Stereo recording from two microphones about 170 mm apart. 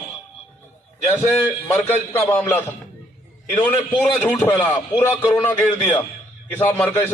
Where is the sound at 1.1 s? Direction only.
10° left (ahead or behind).